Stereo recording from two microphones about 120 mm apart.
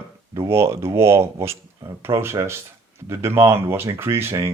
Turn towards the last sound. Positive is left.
turn(degrees=-20)  # may be behind; listen again after turning